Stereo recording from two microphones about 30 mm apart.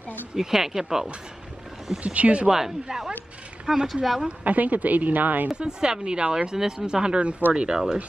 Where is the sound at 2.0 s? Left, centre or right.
Right.